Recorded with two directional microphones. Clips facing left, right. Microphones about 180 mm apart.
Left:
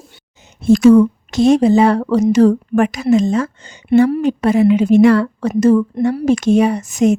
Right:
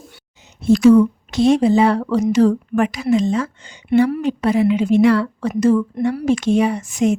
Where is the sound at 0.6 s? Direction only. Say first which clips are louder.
Left 2 dB; 45° left (ahead or behind).